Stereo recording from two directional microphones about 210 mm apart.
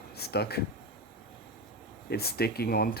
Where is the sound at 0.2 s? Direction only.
50° left (ahead or behind).